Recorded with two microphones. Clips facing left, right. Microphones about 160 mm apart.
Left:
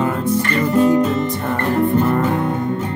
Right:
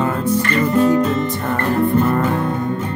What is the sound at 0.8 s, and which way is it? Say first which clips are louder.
Music: left 1 dB; 20° left (ahead or behind).